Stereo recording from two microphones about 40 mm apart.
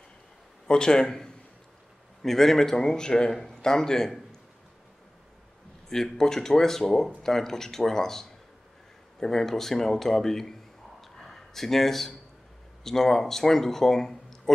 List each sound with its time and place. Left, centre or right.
0.7 s speech: centre
6.1 s speech: centre
11.0 s a sound: centre
12.8 s speech: centre